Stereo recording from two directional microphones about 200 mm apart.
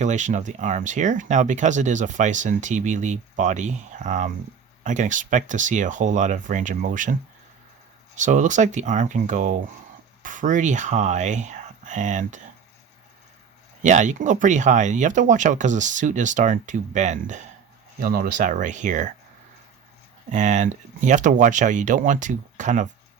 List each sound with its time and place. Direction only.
0.0 s speech: 35° right (ahead or behind)
13.8 s speech: 35° right (ahead or behind)
20.3 s speech: 35° right (ahead or behind)